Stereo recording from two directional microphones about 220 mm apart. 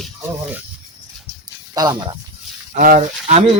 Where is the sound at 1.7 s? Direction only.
20° right (ahead or behind).